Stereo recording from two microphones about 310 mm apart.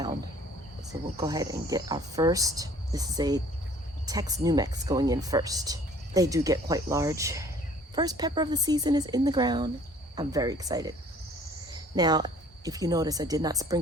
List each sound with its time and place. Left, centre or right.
1.1 s speech: centre